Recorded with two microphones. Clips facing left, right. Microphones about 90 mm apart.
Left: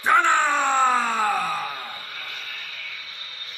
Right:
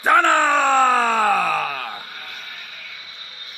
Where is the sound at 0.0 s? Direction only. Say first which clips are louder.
Right 3 dB; 55° right (ahead or behind).